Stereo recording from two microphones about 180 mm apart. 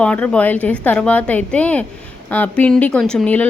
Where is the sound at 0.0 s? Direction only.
5° left (ahead or behind).